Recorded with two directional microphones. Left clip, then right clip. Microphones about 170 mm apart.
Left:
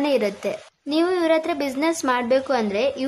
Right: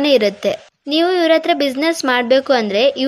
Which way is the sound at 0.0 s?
20° right (ahead or behind).